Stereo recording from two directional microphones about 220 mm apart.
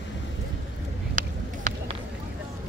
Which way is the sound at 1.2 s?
35° right (ahead or behind).